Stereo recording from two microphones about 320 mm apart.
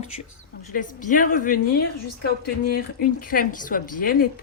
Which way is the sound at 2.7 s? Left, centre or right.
Left.